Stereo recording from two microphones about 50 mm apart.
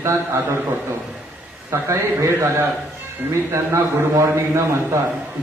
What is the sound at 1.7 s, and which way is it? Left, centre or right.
A man's voice, right.